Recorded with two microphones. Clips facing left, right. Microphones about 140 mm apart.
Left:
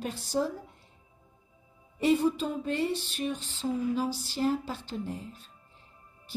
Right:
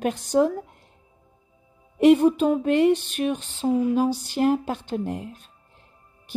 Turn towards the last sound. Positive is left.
turn(degrees=-70)  # may be behind; listen again after turning